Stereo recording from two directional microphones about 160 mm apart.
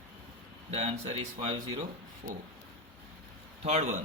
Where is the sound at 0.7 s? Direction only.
45° right (ahead or behind).